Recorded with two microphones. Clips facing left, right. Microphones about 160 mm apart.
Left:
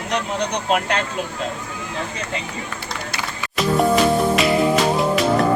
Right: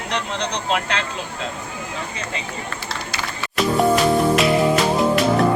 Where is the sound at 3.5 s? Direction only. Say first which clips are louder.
Even; centre (ahead or behind).